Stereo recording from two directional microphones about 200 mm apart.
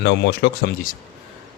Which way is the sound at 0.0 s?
60° left (ahead or behind).